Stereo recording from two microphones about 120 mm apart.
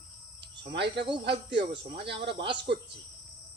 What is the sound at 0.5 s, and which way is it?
Speech, 40° right (ahead or behind).